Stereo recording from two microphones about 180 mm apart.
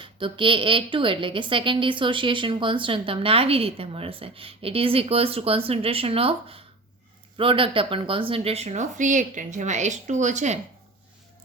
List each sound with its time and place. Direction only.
0.0 s a woman's voice: 30° right (ahead or behind)